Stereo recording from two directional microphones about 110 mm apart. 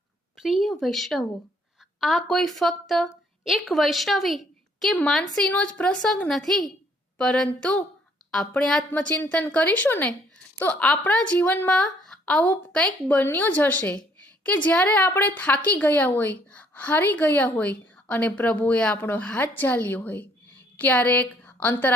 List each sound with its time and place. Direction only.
0.3 s a woman's voice: 5° right (ahead or behind); by 21.9 s 15° left (ahead or behind)